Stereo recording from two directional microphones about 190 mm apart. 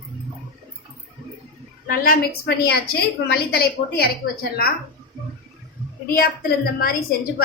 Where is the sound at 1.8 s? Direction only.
50° left (ahead or behind).